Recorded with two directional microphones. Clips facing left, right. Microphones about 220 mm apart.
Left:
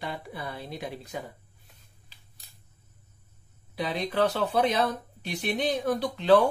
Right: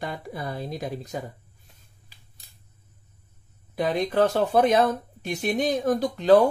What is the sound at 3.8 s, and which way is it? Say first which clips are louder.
Speech: right 4 dB; 45° right (ahead or behind).